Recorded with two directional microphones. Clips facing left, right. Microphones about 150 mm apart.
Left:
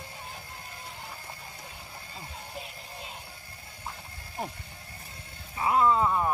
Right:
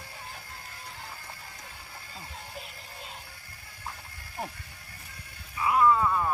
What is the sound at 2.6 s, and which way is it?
Music, centre (ahead or behind).